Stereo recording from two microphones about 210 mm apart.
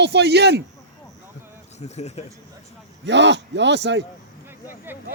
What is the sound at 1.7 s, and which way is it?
Speech, 30° left (ahead or behind).